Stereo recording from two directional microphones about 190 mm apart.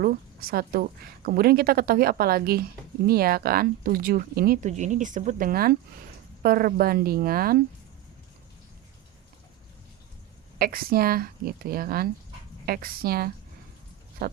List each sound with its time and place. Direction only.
0.0 s speech: 50° right (ahead or behind)
10.6 s speech: 50° right (ahead or behind)